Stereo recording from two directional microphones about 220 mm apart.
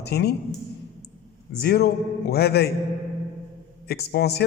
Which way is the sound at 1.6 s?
45° left (ahead or behind).